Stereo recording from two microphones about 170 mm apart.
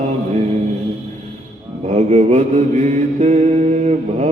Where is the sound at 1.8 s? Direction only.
40° right (ahead or behind).